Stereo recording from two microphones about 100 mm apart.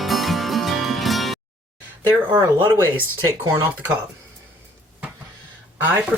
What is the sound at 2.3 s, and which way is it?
Speech, 25° right (ahead or behind).